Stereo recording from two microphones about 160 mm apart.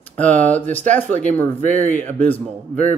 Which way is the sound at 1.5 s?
50° right (ahead or behind).